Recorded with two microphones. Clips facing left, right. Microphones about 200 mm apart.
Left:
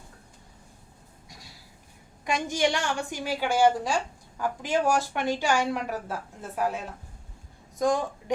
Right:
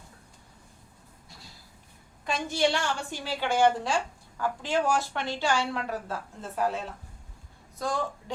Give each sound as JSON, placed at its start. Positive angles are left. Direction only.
{"t": 2.2, "sound": "a woman's voice", "side_deg": 15}